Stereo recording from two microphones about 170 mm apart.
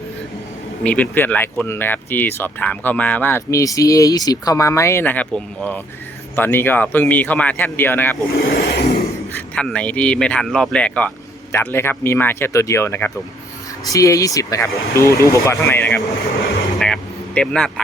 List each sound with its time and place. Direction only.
0.9 s speech: 10° left (ahead or behind)
8.4 s a sound: 70° left (ahead or behind)
9.6 s speech: 5° left (ahead or behind)
16.7 s vehicle: 5° left (ahead or behind)